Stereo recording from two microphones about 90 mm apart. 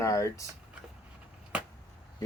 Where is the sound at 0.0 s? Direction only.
35° left (ahead or behind).